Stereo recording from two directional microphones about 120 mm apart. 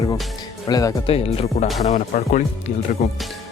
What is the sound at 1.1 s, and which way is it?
Speech, 55° left (ahead or behind).